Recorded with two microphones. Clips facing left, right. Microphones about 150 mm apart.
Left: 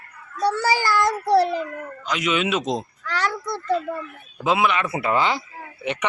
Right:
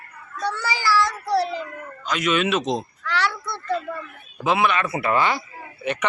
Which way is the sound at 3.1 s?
40° left (ahead or behind).